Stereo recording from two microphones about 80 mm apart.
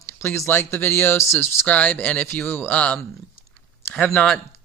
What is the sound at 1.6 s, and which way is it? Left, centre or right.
Speech, centre.